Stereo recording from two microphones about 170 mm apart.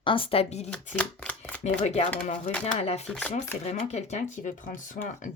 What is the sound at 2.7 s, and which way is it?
Speech, 40° left (ahead or behind).